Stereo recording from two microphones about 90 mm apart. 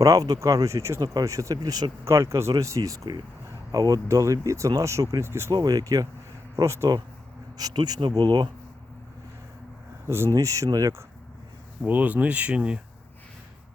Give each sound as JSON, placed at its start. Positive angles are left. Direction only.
{"t": 0.0, "sound": "speech", "side_deg": -40}
{"t": 2.0, "sound": "speech", "side_deg": -30}
{"t": 4.1, "sound": "speech", "side_deg": -35}
{"t": 5.5, "sound": "speech", "side_deg": -45}
{"t": 7.6, "sound": "speech", "side_deg": -50}
{"t": 10.1, "sound": "speech", "side_deg": -30}
{"t": 11.8, "sound": "speech", "side_deg": -20}